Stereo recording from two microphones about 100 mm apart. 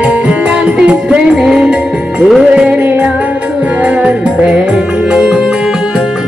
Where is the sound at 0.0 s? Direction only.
15° right (ahead or behind).